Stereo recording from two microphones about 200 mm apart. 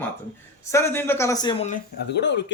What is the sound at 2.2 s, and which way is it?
Speech, 60° left (ahead or behind).